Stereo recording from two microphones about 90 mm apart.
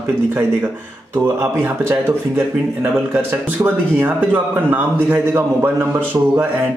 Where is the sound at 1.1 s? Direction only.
25° right (ahead or behind).